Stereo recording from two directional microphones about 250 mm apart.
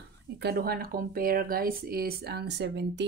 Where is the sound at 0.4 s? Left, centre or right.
Right.